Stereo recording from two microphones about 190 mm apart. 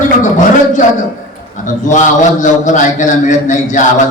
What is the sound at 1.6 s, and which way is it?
A man's voice, 40° left (ahead or behind).